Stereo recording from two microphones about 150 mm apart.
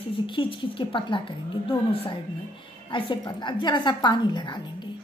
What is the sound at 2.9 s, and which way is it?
A woman's voice, 30° left (ahead or behind).